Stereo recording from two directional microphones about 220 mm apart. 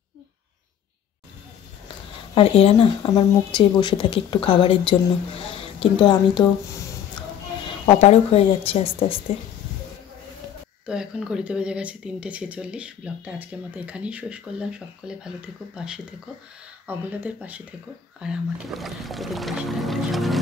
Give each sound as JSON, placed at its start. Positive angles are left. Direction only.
{"t": 2.3, "sound": "a woman's voice", "side_deg": 25}
{"t": 7.8, "sound": "speech", "side_deg": 30}
{"t": 10.9, "sound": "speech", "side_deg": -5}